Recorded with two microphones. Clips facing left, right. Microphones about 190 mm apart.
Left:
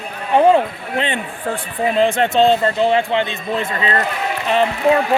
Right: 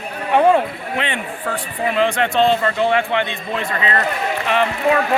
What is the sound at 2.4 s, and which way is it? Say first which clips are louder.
Speech: left 2 dB; 35° left (ahead or behind).